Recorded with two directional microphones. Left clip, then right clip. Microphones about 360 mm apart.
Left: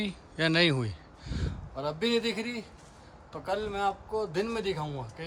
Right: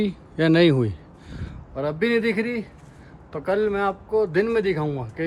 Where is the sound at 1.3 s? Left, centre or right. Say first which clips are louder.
Left 2 dB; centre.